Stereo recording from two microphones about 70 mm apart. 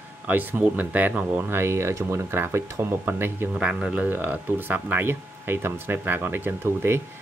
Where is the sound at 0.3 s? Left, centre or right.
Right.